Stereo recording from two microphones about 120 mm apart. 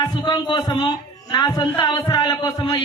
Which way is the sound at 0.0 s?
35° left (ahead or behind).